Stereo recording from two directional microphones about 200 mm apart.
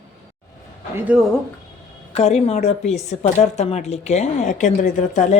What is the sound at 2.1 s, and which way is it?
A woman's voice, 35° left (ahead or behind).